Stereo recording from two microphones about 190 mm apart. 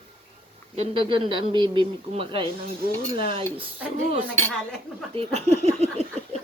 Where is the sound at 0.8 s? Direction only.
25° right (ahead or behind).